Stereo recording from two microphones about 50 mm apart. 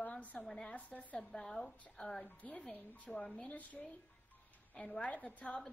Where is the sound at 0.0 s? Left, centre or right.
Left.